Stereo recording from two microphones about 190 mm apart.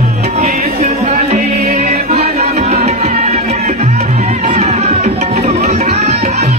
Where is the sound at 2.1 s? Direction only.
35° right (ahead or behind).